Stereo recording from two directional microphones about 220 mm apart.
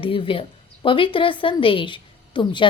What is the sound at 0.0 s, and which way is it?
A woman's voice, 25° left (ahead or behind).